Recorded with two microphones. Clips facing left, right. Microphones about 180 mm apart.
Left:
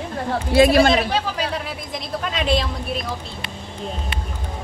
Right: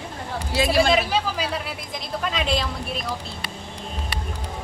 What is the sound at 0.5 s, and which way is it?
Speech, 55° left (ahead or behind).